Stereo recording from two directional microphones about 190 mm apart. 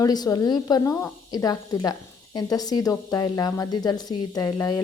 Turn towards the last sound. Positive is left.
turn(degrees=20)  # may be behind; listen again after turning